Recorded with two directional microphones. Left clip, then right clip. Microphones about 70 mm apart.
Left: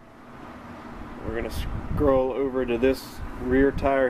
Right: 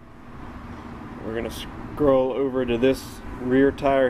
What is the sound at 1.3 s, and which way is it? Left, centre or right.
Speech, centre.